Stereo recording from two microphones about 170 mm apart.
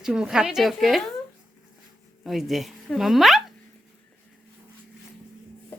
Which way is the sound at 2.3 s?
Centre (ahead or behind).